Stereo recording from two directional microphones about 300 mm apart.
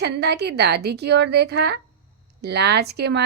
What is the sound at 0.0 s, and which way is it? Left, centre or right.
A woman's voice, right.